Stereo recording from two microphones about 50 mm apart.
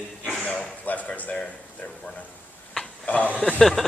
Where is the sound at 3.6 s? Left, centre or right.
Centre.